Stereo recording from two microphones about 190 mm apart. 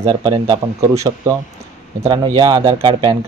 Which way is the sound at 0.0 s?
20° right (ahead or behind).